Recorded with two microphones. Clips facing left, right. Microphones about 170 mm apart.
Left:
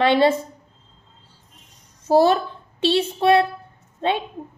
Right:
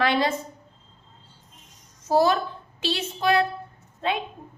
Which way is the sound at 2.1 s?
35° left (ahead or behind).